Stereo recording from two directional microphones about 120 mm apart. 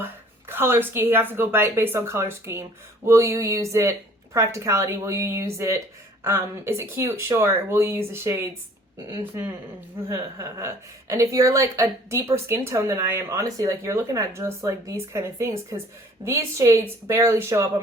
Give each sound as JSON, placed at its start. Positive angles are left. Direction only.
{"t": 0.0, "sound": "speech", "side_deg": -20}